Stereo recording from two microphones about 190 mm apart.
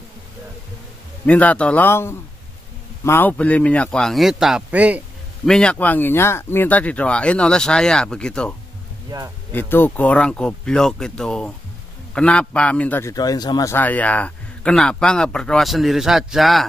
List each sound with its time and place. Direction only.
1.2 s a man's voice: 10° left (ahead or behind)
5.5 s speech: 5° left (ahead or behind)
9.1 s speech: 20° right (ahead or behind)
9.5 s a man's voice: 10° left (ahead or behind)